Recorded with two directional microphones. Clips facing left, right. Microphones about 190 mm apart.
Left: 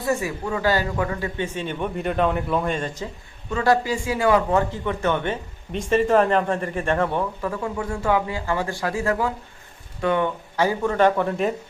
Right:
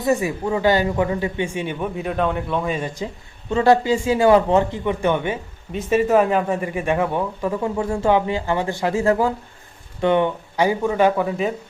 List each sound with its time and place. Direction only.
0.0 s a man's voice: 20° right (ahead or behind)
3.5 s a man's voice: 25° right (ahead or behind); by 11.5 s centre (ahead or behind)